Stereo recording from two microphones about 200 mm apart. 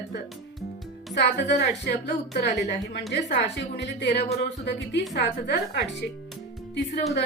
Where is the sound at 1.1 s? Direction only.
60° left (ahead or behind).